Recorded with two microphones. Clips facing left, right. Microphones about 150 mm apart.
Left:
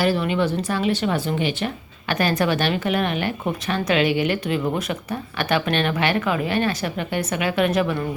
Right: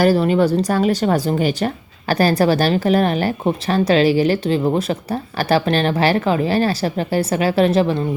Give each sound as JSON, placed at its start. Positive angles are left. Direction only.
{"t": 0.0, "sound": "speech", "side_deg": -40}